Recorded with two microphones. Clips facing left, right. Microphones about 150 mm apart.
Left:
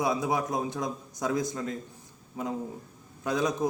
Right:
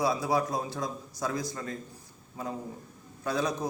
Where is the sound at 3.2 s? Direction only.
20° left (ahead or behind).